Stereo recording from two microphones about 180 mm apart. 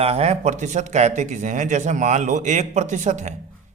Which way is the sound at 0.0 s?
35° right (ahead or behind).